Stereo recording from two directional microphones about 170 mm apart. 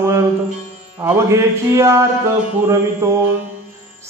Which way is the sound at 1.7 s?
15° right (ahead or behind).